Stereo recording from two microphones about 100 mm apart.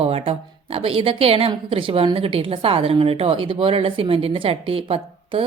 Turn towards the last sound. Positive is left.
turn(degrees=-70)  # may be behind; listen again after turning